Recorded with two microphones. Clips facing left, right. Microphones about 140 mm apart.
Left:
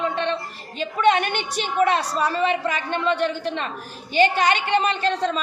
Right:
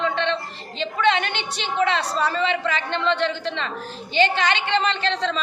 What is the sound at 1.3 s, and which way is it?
A woman's voice, 45° left (ahead or behind).